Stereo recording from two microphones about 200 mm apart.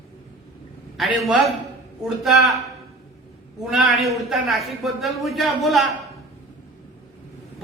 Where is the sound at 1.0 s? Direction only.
Centre (ahead or behind).